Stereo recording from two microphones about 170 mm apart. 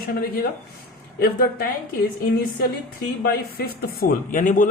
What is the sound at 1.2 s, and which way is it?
Speech, 65° left (ahead or behind).